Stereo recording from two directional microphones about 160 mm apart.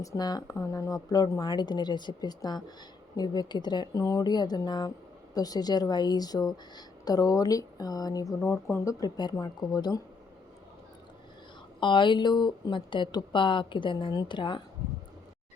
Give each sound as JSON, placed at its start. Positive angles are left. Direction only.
{"t": 0.0, "sound": "a woman's voice", "side_deg": 25}
{"t": 11.8, "sound": "a woman's voice", "side_deg": 30}